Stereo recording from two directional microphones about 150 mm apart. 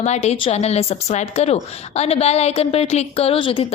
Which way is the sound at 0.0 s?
50° left (ahead or behind).